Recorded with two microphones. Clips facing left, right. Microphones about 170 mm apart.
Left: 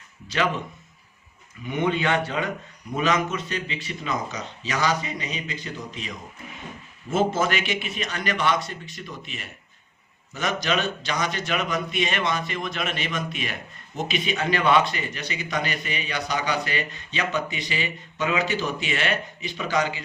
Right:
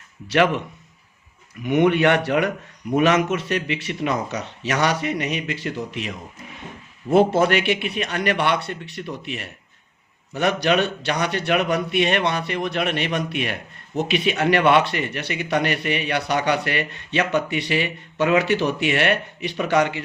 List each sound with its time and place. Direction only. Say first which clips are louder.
0.3 s speech: right 6 dB; 70° right (ahead or behind)
1.6 s speech: right 7 dB; 75° right (ahead or behind)